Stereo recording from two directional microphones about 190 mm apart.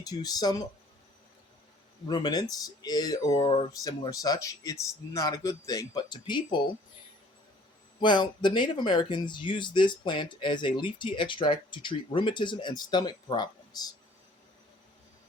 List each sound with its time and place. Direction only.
0.0 s speech: 20° left (ahead or behind)
2.0 s speech: 20° left (ahead or behind)
8.0 s speech: 25° left (ahead or behind)